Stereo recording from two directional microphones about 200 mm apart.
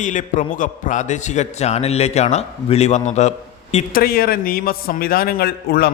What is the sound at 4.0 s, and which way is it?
A man's voice, 50° left (ahead or behind).